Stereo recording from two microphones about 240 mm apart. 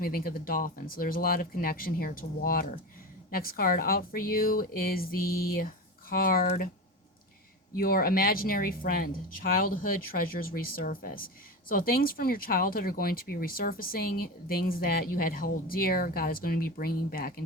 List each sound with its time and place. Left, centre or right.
0.0 s speech: left
7.8 s speech: left